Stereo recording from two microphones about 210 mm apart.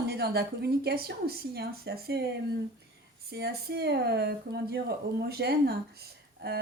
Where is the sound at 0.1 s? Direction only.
50° right (ahead or behind).